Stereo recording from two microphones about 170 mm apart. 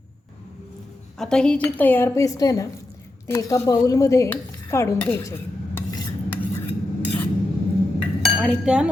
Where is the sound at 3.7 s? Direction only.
20° left (ahead or behind).